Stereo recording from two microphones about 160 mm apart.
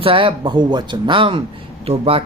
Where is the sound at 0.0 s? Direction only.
35° right (ahead or behind).